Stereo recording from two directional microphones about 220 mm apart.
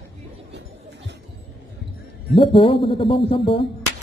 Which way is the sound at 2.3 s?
25° left (ahead or behind).